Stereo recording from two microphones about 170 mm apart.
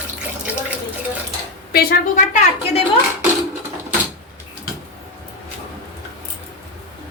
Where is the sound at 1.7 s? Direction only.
65° left (ahead or behind).